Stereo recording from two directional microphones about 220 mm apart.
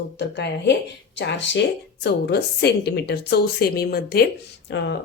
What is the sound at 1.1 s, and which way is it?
A woman's voice, 55° left (ahead or behind).